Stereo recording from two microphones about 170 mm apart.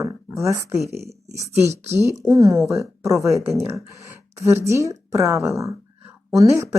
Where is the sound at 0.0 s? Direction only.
20° right (ahead or behind).